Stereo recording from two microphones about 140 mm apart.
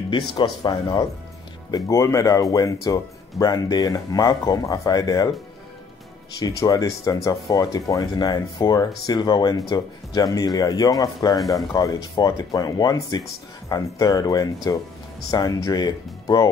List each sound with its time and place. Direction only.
0.3 s speech: 30° left (ahead or behind)
6.4 s speech: 25° left (ahead or behind)
11.3 s speech: centre (ahead or behind)
11.7 s speech: 25° left (ahead or behind)